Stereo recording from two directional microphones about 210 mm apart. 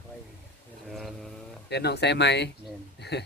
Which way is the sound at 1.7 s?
50° left (ahead or behind).